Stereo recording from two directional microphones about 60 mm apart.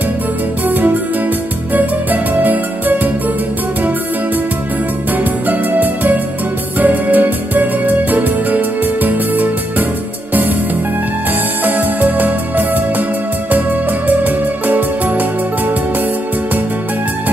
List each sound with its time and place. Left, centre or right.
0.7 s music: right
5.1 s music: right
11.6 s music: right
14.0 s music: right